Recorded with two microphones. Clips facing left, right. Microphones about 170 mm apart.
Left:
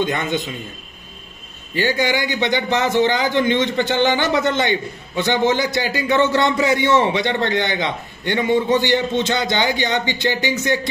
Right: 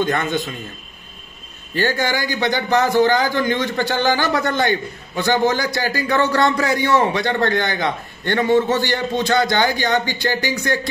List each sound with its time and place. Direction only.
0.0 s a man's voice: 20° left (ahead or behind)
1.9 s a man's voice: 20° left (ahead or behind)